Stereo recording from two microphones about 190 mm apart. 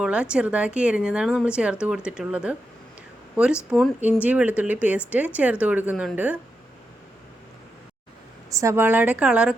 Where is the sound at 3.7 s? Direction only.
5° right (ahead or behind).